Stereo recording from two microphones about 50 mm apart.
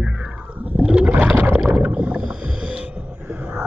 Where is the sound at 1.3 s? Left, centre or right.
Right.